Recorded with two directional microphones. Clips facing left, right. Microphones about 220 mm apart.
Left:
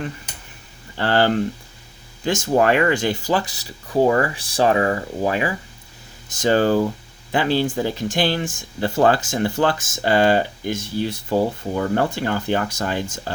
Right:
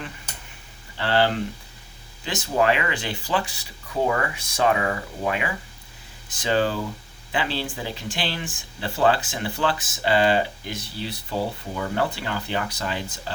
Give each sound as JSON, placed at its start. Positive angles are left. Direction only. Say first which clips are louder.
{"t": 0.9, "sound": "speech", "louder": "left 4 dB", "side_deg": 45}